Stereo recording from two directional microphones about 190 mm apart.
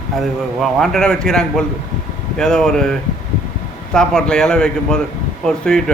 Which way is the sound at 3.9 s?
5° left (ahead or behind).